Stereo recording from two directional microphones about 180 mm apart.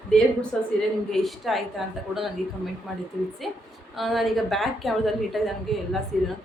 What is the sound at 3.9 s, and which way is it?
A woman's voice, centre (ahead or behind).